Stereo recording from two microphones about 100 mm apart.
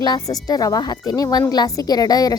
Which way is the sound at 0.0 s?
40° left (ahead or behind).